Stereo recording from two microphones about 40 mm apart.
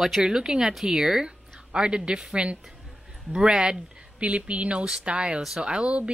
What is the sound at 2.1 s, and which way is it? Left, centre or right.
Speech, centre.